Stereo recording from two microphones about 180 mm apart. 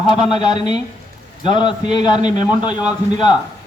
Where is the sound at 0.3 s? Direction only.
25° left (ahead or behind).